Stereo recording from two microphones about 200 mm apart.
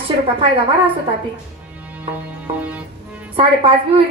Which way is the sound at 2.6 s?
5° right (ahead or behind).